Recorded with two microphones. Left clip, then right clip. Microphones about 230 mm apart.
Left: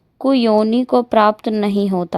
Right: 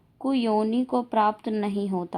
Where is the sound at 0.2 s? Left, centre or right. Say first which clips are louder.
Left 10 dB; left.